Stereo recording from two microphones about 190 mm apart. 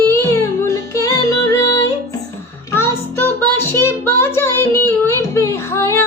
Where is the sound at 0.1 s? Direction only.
15° left (ahead or behind).